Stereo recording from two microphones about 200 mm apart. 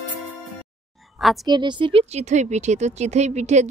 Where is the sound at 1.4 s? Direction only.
20° right (ahead or behind).